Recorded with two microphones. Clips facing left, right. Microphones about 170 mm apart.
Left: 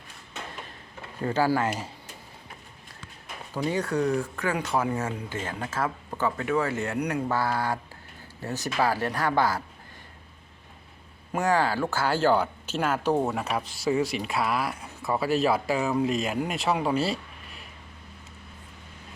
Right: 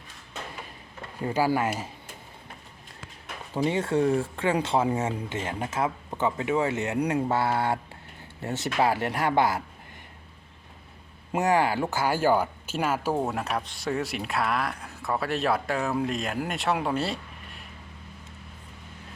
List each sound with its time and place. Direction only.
1.2 s speech: 15° right (ahead or behind)
3.5 s speech: 25° right (ahead or behind)
11.3 s speech: 20° right (ahead or behind); by 17.6 s centre (ahead or behind)